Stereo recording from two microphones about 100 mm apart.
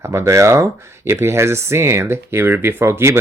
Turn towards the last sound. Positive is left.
turn(degrees=-25)  # may be behind; listen again after turning